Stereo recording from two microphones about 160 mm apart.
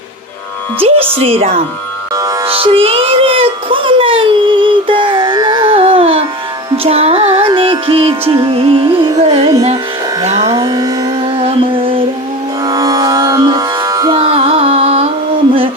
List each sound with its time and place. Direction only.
1.2 s speech: 35° right (ahead or behind)
2.1 s music: 20° right (ahead or behind)
2.5 s music: 35° right (ahead or behind)
8.3 s carnatic music: 30° right (ahead or behind)
10.2 s music: 40° right (ahead or behind)
10.5 s music: 25° right (ahead or behind)
12.6 s music: 20° right (ahead or behind)
14.2 s carnatic music: 35° right (ahead or behind)